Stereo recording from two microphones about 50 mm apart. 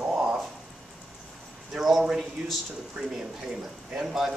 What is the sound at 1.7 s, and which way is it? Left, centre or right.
Speech, centre.